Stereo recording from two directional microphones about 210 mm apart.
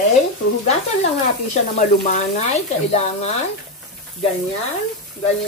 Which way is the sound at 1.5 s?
35° left (ahead or behind).